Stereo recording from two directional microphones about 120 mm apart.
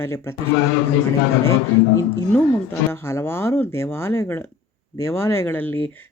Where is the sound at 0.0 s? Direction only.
20° left (ahead or behind).